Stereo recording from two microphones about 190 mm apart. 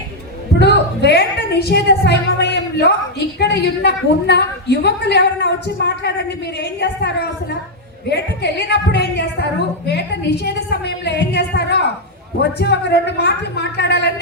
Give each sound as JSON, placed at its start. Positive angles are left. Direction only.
{"t": 0.6, "sound": "a woman's voice", "side_deg": 60}